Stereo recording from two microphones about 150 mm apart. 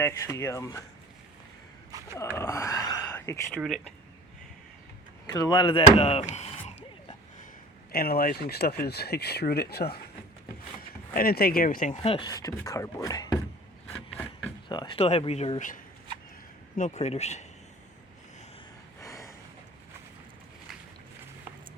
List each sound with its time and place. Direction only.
0.0 s speech: 15° left (ahead or behind)
2.1 s speech: 15° left (ahead or behind)
3.1 s a sound: 15° left (ahead or behind)
3.6 s speech: 5° left (ahead or behind)
5.2 s speech: 25° left (ahead or behind)
6.0 s chop: 40° left (ahead or behind)
7.9 s speech: 90° left
10.8 s speech: 75° left (ahead or behind)
12.0 s speech: 35° left (ahead or behind)
12.3 s speech: 25° left (ahead or behind)
14.7 s speech: 30° left (ahead or behind); by 17.4 s 45° left (ahead or behind)
18.9 s a sound: 20° left (ahead or behind)